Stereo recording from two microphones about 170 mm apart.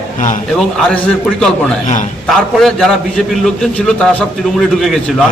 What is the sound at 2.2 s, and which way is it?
A man's voice, centre (ahead or behind).